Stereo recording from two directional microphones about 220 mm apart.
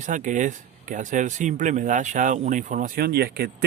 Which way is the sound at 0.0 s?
35° right (ahead or behind).